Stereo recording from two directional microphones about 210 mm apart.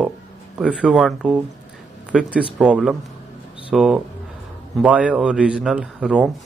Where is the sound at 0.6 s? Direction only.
5° right (ahead or behind).